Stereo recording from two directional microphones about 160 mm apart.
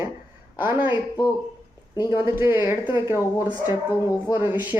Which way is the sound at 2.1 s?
15° right (ahead or behind).